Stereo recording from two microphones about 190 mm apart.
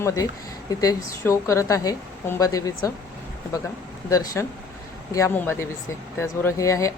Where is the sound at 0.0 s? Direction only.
15° left (ahead or behind).